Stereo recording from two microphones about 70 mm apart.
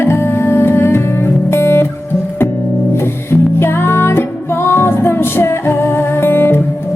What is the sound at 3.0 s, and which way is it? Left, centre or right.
Music, left.